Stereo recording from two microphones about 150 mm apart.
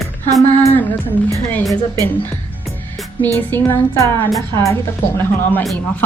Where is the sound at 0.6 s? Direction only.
10° left (ahead or behind).